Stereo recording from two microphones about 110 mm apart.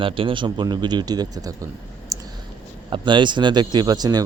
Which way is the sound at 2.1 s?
30° right (ahead or behind).